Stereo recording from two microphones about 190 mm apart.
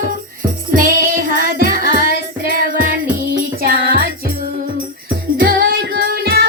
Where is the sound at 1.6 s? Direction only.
50° right (ahead or behind).